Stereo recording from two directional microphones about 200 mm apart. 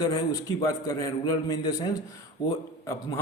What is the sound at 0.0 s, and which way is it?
A man's voice, 20° left (ahead or behind).